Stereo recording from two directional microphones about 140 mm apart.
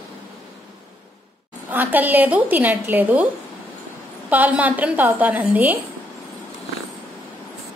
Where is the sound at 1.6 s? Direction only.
15° right (ahead or behind).